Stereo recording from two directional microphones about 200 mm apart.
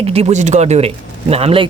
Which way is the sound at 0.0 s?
30° right (ahead or behind).